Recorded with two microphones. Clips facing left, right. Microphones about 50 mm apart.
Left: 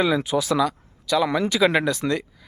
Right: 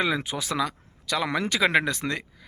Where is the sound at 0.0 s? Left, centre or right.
Right.